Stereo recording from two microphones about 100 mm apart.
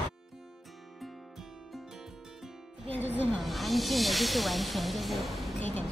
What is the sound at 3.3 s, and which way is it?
Speech, centre (ahead or behind).